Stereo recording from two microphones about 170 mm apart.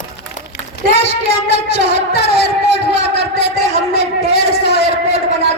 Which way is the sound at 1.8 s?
70° left (ahead or behind).